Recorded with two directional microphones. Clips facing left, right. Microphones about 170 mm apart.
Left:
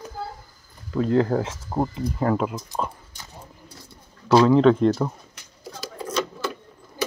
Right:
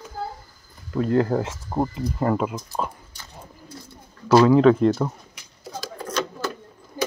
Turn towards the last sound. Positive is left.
turn(degrees=0)  # may be behind; listen again after turning